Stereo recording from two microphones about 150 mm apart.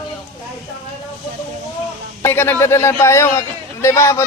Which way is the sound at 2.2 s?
15° left (ahead or behind).